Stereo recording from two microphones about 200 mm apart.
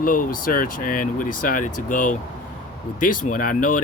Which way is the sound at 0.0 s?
45° left (ahead or behind).